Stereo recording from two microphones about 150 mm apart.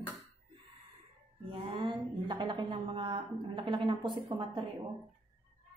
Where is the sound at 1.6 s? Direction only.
35° right (ahead or behind).